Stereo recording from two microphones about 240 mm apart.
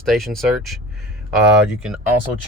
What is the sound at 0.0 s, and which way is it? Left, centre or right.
Speech, centre.